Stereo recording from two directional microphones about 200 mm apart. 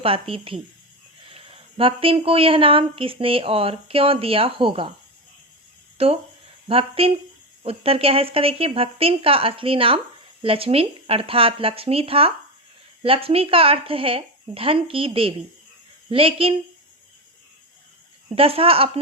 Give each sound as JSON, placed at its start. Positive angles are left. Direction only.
{"t": 0.0, "sound": "speech", "side_deg": -25}
{"t": 6.0, "sound": "speech", "side_deg": -30}
{"t": 18.3, "sound": "speech", "side_deg": -30}